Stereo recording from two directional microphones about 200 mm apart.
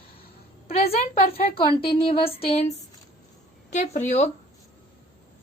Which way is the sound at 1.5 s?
25° left (ahead or behind).